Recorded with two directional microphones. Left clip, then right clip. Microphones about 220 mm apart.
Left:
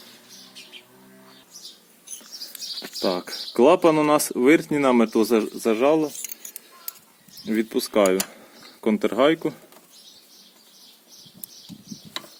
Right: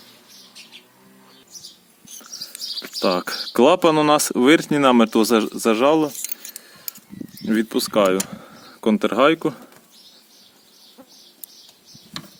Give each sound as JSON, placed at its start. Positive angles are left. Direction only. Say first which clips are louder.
{"t": 3.0, "sound": "speech", "louder": "right 5 dB", "side_deg": -45}
{"t": 7.4, "sound": "speech", "louder": "right 3 dB", "side_deg": -40}